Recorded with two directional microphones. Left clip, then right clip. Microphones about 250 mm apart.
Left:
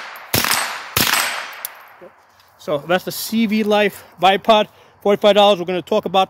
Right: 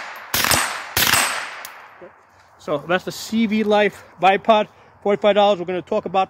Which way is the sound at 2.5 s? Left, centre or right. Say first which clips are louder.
Left 2 dB; left.